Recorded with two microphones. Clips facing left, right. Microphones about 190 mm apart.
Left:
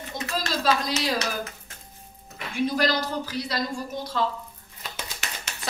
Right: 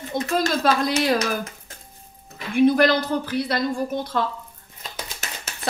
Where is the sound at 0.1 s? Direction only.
55° right (ahead or behind).